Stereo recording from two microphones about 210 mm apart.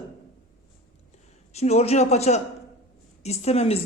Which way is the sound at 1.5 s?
30° left (ahead or behind).